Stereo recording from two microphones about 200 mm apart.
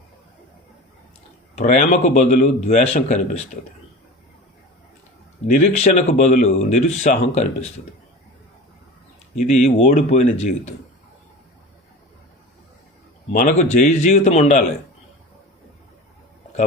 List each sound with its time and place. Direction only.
1.5 s speech: 40° left (ahead or behind)
5.5 s speech: 35° left (ahead or behind)
9.5 s speech: 35° left (ahead or behind)
13.3 s speech: 40° left (ahead or behind)